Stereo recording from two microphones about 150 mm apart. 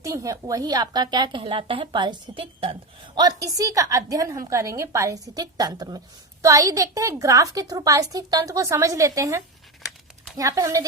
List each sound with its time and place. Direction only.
0.0 s a woman's voice: 20° right (ahead or behind)
3.2 s a woman's voice: 25° right (ahead or behind)